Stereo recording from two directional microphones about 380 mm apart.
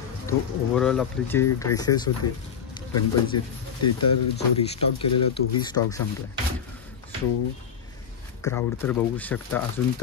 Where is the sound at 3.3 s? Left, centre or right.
Left.